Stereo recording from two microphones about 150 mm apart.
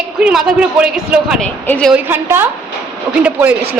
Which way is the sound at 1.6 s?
10° left (ahead or behind).